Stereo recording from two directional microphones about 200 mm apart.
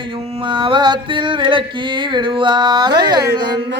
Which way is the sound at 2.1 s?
25° right (ahead or behind).